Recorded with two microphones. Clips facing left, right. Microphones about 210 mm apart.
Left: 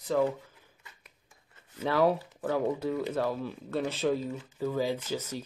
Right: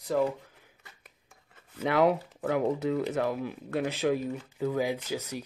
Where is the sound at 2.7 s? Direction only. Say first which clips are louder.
Right 2 dB; 80° right.